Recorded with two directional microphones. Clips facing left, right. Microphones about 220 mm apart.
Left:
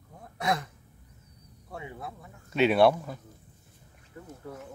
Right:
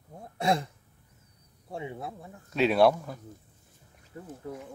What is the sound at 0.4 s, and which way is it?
Speech, 25° right (ahead or behind).